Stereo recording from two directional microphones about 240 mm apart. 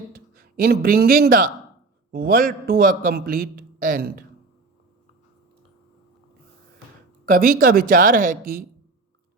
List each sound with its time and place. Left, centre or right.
0.6 s a man's voice: right
7.3 s a man's voice: right